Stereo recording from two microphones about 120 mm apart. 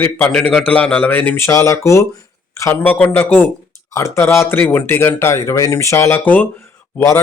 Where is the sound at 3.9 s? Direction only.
25° left (ahead or behind).